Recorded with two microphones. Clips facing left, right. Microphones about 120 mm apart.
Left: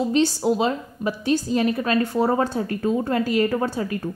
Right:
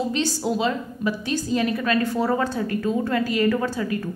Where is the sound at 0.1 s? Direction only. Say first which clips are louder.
Left 4 dB; 35° left (ahead or behind).